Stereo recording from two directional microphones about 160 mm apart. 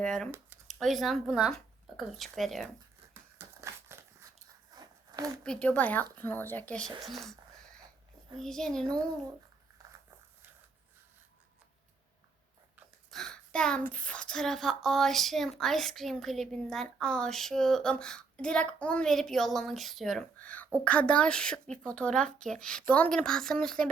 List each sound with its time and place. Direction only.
0.0 s a woman's voice: 5° left (ahead or behind)
3.3 s crumpling: 15° right (ahead or behind)
4.7 s a sound: 25° right (ahead or behind)
5.4 s a woman's voice: 5° left (ahead or behind)
8.4 s a woman's voice: 5° left (ahead or behind)
13.1 s a woman's voice: 5° left (ahead or behind)